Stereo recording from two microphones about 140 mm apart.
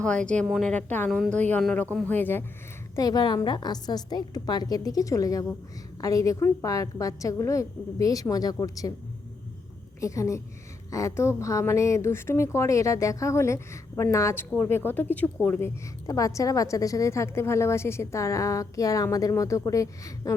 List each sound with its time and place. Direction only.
0.0 s speech: 5° left (ahead or behind)
0.4 s a woman's voice: 5° right (ahead or behind)
0.7 s speech: 10° left (ahead or behind)
2.9 s a woman's voice: 25° left (ahead or behind)
10.0 s a woman's voice: 20° left (ahead or behind)
16.0 s a woman's voice: 25° left (ahead or behind)